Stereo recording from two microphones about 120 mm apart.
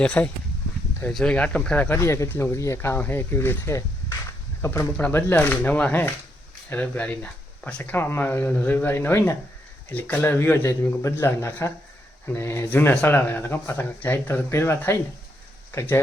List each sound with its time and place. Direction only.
0.0 s speech: 10° left (ahead or behind)